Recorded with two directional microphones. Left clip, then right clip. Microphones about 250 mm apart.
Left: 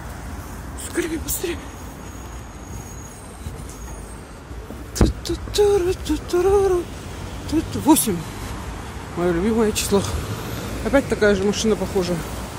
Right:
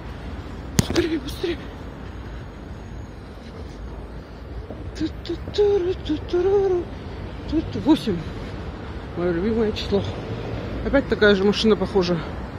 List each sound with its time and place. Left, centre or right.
1.0 s speech: centre
4.9 s a sound: left
7.4 s speech: left
9.2 s speech: left
10.9 s speech: centre